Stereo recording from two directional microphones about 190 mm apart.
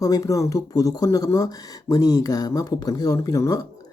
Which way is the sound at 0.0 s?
15° left (ahead or behind).